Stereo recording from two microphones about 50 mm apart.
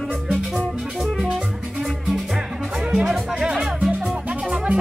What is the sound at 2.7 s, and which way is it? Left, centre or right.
Music, centre.